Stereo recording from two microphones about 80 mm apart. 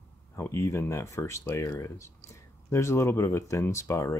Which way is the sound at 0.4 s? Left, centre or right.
Left.